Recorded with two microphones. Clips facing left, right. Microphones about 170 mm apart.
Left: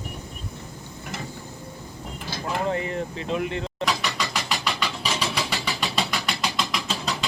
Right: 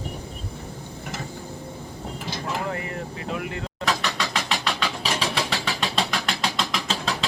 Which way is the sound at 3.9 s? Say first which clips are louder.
Right 4 dB; 5° left (ahead or behind).